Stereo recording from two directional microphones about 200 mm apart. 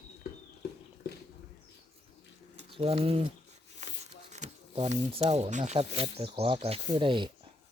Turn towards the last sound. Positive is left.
turn(degrees=-25)  # may be behind; listen again after turning